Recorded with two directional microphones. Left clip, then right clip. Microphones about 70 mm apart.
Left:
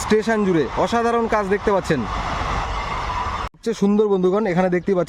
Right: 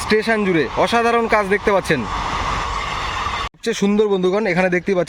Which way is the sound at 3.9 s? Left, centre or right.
Left.